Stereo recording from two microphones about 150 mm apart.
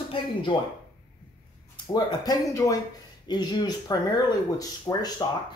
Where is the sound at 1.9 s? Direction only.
25° left (ahead or behind).